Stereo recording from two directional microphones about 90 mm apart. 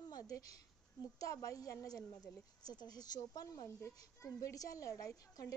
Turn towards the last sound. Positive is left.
turn(degrees=40)  # may be behind; listen again after turning